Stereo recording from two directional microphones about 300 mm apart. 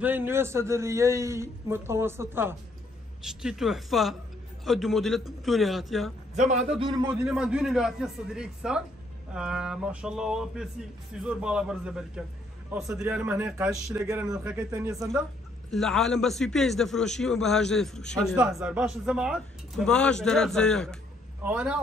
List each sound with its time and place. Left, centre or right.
0.0 s a man's voice: centre
6.3 s a man's voice: right
7.2 s a man's voice: centre
15.7 s a man's voice: centre